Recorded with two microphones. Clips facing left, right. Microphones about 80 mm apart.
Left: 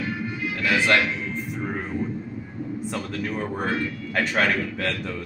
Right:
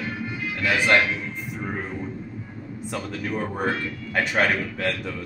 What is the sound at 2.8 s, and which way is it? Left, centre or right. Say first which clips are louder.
A man's voice: right 1 dB; centre.